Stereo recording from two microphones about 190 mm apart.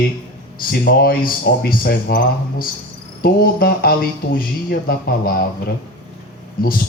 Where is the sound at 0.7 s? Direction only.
50° left (ahead or behind).